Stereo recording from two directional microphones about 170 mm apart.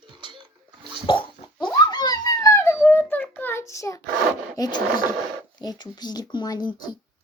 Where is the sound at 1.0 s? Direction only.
30° left (ahead or behind).